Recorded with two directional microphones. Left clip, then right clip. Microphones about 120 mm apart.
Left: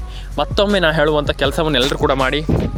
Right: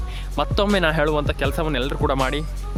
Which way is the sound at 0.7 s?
30° left (ahead or behind).